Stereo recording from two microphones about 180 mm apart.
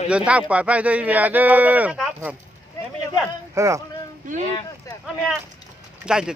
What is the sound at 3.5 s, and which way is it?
Speech, 15° right (ahead or behind).